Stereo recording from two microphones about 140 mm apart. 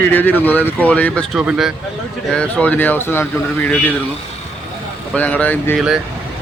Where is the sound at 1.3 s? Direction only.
5° right (ahead or behind).